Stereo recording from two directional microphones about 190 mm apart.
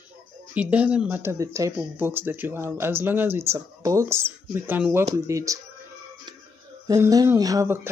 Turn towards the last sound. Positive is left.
turn(degrees=-15)  # may be behind; listen again after turning